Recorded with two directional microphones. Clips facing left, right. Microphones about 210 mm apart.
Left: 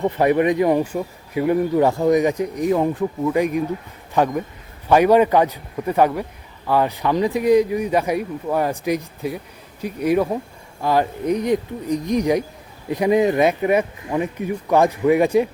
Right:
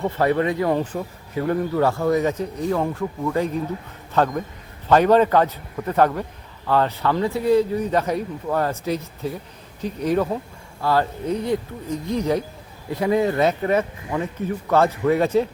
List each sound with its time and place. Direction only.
0.0 s speech: 15° left (ahead or behind)